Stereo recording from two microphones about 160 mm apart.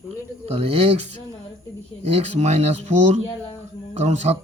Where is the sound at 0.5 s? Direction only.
40° right (ahead or behind).